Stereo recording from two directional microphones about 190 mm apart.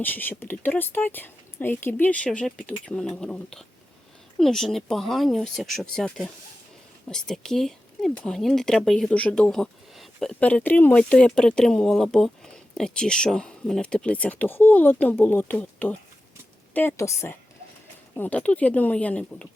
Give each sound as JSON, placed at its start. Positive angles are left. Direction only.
{"t": 0.0, "sound": "speech", "side_deg": 10}